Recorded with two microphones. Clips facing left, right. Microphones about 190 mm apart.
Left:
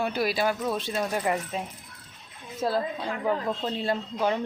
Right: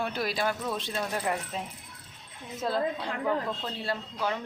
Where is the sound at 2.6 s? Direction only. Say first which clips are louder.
Left 3 dB; 10° left (ahead or behind).